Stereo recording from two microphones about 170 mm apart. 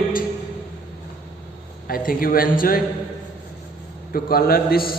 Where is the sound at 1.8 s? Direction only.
55° left (ahead or behind).